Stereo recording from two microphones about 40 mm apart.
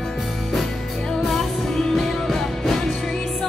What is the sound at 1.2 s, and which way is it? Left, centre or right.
Music, centre.